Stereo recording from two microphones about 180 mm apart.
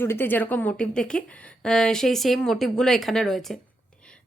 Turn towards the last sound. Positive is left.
turn(degrees=0)  # may be behind; listen again after turning